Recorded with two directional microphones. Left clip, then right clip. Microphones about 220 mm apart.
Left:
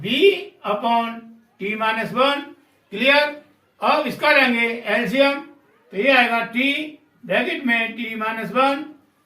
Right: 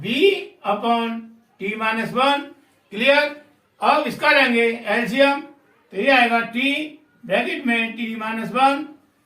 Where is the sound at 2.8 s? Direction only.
25° right (ahead or behind).